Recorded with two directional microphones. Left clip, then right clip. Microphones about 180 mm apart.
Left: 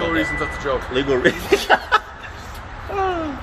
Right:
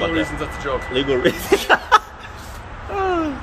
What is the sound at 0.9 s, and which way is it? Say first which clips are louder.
Speech: even; centre (ahead or behind).